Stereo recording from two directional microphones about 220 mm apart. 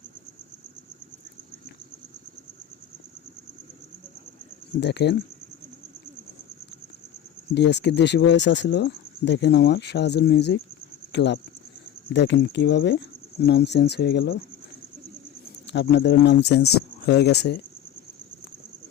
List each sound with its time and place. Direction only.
4.8 s speech: 50° left (ahead or behind)
7.5 s speech: 50° left (ahead or behind)
15.6 s speech: 50° left (ahead or behind)